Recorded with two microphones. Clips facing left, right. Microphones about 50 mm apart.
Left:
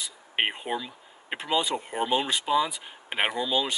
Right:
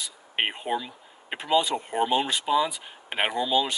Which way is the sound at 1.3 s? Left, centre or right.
Centre.